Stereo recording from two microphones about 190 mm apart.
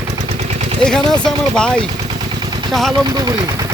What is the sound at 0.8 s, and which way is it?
Speech, 5° left (ahead or behind).